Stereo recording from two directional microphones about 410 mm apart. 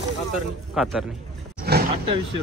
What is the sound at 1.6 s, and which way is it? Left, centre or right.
Roaring cats, right.